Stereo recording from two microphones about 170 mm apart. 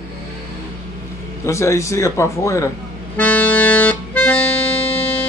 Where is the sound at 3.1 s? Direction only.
10° left (ahead or behind).